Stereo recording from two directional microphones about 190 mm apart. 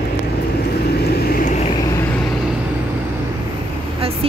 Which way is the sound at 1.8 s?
15° left (ahead or behind).